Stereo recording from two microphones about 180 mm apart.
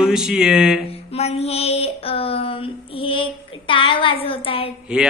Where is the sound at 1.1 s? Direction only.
35° left (ahead or behind).